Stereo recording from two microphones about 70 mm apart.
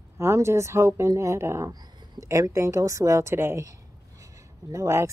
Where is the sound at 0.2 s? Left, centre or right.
Right.